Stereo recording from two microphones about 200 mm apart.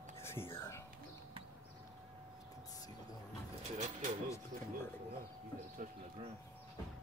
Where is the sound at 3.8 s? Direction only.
40° right (ahead or behind).